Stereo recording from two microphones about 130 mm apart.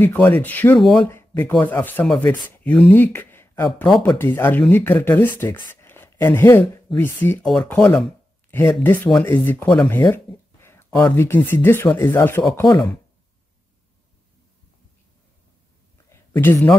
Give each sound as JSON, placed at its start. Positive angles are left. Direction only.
{"t": 0.0, "sound": "speech", "side_deg": 15}
{"t": 0.7, "sound": "speech", "side_deg": 0}
{"t": 1.0, "sound": "speech", "side_deg": 20}
{"t": 5.7, "sound": "a sound", "side_deg": 15}
{"t": 7.0, "sound": "speech", "side_deg": 20}
{"t": 8.5, "sound": "speech", "side_deg": 15}
{"t": 9.8, "sound": "a sound", "side_deg": 15}
{"t": 11.1, "sound": "speech", "side_deg": 15}
{"t": 16.1, "sound": "a sound", "side_deg": 15}